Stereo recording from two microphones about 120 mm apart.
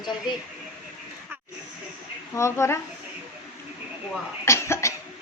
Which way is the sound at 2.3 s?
25° left (ahead or behind).